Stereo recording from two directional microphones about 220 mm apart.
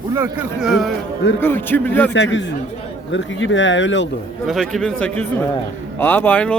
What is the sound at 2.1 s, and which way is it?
Speech, 55° left (ahead or behind).